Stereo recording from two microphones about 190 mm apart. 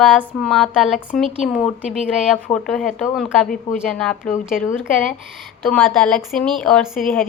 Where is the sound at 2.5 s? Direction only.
25° left (ahead or behind).